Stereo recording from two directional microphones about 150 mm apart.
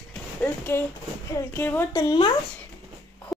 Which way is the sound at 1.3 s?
15° left (ahead or behind).